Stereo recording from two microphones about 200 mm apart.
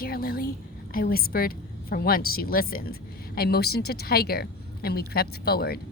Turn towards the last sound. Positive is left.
turn(degrees=50)  # may be behind; listen again after turning